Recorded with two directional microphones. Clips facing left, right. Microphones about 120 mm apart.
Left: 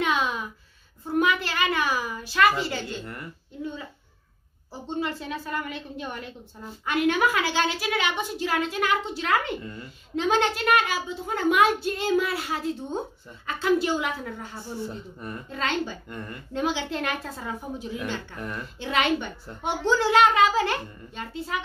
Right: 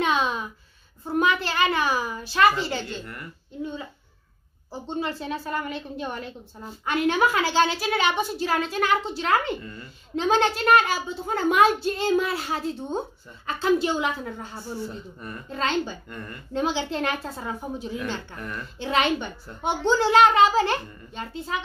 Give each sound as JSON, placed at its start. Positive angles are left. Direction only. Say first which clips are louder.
{"t": 0.0, "sound": "a sound", "louder": "right 2 dB", "side_deg": -30}
{"t": 1.1, "sound": "a child's voice", "louder": "right 1 dB", "side_deg": -30}
{"t": 4.8, "sound": "a woman's voice", "louder": "right 1 dB", "side_deg": -30}
{"t": 9.6, "sound": "speech", "louder": "left 1 dB", "side_deg": 20}
{"t": 10.1, "sound": "a woman's voice", "louder": "right 2 dB", "side_deg": -35}
{"t": 16.1, "sound": "speech", "louder": "left 1 dB", "side_deg": 20}
{"t": 16.5, "sound": "a child's voice", "louder": "right 2 dB", "side_deg": -30}